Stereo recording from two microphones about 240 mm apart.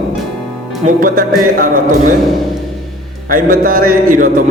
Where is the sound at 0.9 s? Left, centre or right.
Right.